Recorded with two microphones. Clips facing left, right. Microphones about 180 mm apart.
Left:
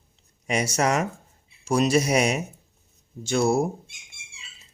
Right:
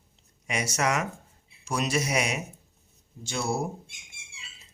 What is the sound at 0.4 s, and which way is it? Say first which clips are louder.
Speech: left 4 dB; 35° left (ahead or behind).